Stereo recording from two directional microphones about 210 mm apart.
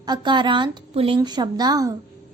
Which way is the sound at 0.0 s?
20° right (ahead or behind).